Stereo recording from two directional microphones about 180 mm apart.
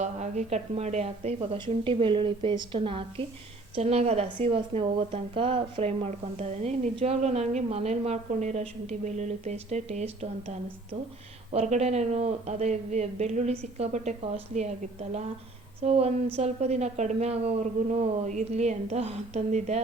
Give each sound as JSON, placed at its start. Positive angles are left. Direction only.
{"t": 0.0, "sound": "speech", "side_deg": -40}
{"t": 11.5, "sound": "speech", "side_deg": -40}
{"t": 15.8, "sound": "speech", "side_deg": -35}